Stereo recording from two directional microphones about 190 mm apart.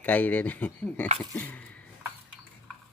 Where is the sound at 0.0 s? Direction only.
10° left (ahead or behind).